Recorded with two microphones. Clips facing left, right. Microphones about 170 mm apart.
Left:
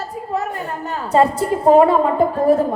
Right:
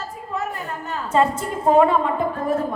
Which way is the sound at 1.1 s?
35° left (ahead or behind).